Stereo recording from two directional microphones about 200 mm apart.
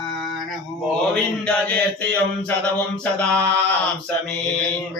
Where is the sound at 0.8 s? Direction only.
5° left (ahead or behind).